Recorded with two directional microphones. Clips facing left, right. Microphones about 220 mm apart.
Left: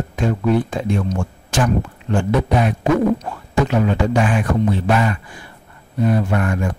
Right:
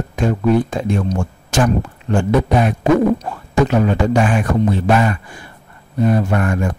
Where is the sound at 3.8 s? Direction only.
45° right (ahead or behind).